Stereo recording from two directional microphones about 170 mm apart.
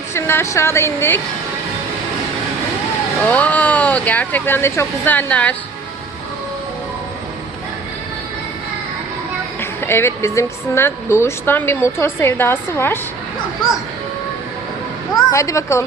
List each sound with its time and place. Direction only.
0.1 s a woman's voice: 15° left (ahead or behind)
3.2 s a woman's voice: 10° left (ahead or behind)
9.6 s a woman's voice: 15° left (ahead or behind)
15.1 s a woman's voice: 20° left (ahead or behind)